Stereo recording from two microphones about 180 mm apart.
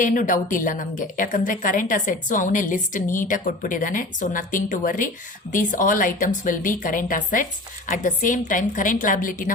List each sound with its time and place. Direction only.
0.0 s a woman's voice: 45° left (ahead or behind)